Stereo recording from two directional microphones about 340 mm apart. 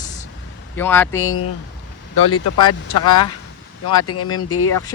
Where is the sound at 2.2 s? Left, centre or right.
Left.